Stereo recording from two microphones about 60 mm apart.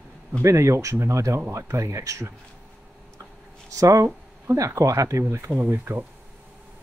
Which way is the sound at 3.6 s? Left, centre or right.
Right.